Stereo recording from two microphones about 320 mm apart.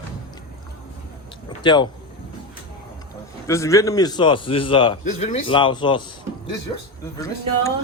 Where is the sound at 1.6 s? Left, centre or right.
Centre.